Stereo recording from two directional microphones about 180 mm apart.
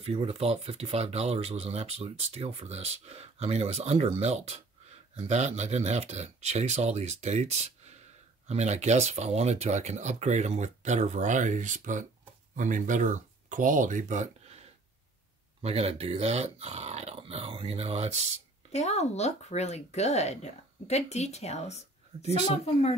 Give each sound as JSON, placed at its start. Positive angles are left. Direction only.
{"t": 0.0, "sound": "speech", "side_deg": -35}
{"t": 15.6, "sound": "speech", "side_deg": -35}
{"t": 18.7, "sound": "speech", "side_deg": 35}